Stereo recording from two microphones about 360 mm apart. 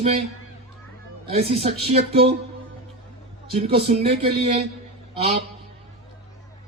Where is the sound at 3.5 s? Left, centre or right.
Centre.